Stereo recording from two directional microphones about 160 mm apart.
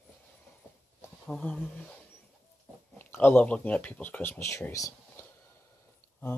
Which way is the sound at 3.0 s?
10° left (ahead or behind).